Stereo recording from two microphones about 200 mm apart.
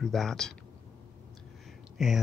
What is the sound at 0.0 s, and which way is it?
Speech, centre (ahead or behind).